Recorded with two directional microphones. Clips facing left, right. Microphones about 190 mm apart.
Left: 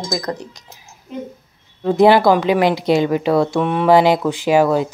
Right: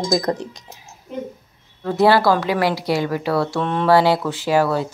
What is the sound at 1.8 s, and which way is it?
Speech, 20° left (ahead or behind).